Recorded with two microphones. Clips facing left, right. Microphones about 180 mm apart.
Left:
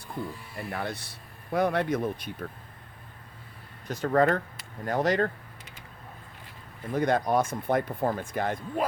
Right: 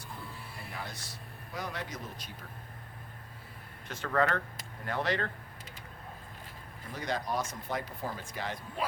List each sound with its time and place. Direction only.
0.5 s speech: 60° left (ahead or behind)
3.8 s speech: 40° left (ahead or behind)
6.9 s speech: 55° left (ahead or behind)